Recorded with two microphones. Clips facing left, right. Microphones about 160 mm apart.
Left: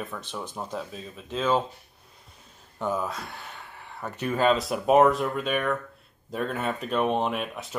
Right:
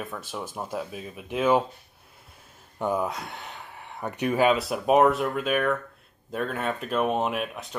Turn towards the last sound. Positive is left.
turn(degrees=0)  # may be behind; listen again after turning